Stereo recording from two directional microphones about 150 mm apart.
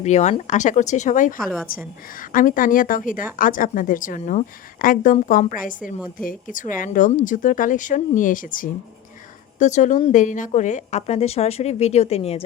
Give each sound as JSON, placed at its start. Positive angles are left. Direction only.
{"t": 0.0, "sound": "a woman's voice", "side_deg": 50}
{"t": 9.6, "sound": "a woman's voice", "side_deg": 55}